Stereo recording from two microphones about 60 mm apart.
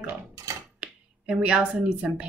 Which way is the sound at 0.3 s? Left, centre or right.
Right.